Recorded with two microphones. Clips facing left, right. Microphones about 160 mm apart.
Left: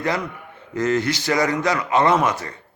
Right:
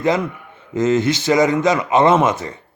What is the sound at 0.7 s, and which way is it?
A man's voice, 20° right (ahead or behind).